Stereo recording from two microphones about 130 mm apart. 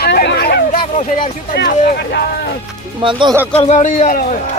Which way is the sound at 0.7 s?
90° left.